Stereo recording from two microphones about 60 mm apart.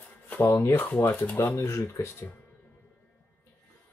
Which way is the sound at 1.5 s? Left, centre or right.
Left.